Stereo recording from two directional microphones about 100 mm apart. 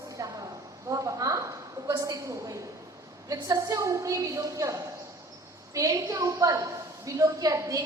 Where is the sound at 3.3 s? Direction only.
40° right (ahead or behind).